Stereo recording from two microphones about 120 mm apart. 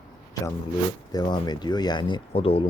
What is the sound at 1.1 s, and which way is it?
Speech, 35° left (ahead or behind).